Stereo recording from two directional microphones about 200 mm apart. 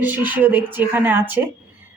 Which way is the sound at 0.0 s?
10° right (ahead or behind).